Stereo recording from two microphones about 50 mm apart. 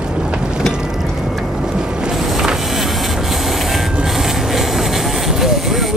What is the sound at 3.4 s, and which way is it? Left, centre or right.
Train, centre.